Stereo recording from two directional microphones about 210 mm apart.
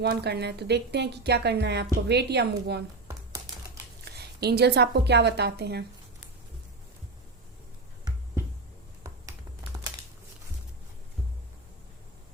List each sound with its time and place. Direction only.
0.0 s a woman's voice: 50° right (ahead or behind)
4.0 s a woman's voice: 50° right (ahead or behind)
9.7 s crumpling: 15° right (ahead or behind)